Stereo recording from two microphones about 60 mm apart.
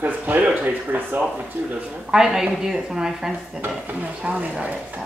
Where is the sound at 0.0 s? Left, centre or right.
Right.